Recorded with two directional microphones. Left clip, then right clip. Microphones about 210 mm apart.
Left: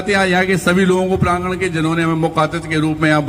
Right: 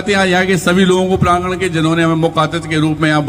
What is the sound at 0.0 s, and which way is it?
A man's voice, 30° right (ahead or behind).